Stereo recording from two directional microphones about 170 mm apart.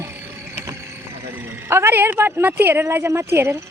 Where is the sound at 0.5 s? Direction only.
15° right (ahead or behind).